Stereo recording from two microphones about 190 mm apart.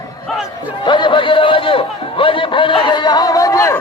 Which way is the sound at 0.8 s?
25° left (ahead or behind).